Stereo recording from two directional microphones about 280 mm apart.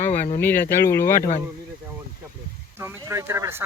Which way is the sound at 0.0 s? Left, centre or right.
Left.